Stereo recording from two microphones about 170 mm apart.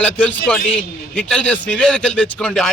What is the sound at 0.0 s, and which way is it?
A man's voice, 5° left (ahead or behind).